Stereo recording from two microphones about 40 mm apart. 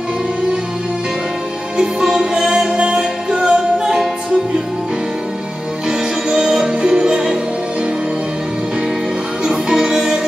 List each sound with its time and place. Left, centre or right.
1.8 s music: centre
5.9 s music: centre
9.8 s music: centre